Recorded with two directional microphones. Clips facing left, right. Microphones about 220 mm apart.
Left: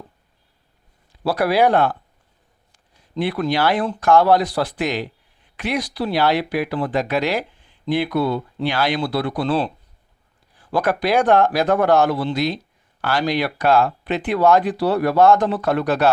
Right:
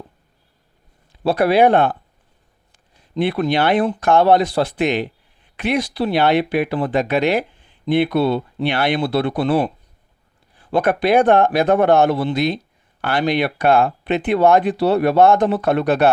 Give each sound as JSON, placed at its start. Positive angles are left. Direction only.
{"t": 1.2, "sound": "speech", "side_deg": -25}
{"t": 3.2, "sound": "speech", "side_deg": -25}
{"t": 8.6, "sound": "speech", "side_deg": -60}
{"t": 9.0, "sound": "speech", "side_deg": -25}
{"t": 10.6, "sound": "speech", "side_deg": -25}
{"t": 13.6, "sound": "speech", "side_deg": -55}
{"t": 13.8, "sound": "speech", "side_deg": -25}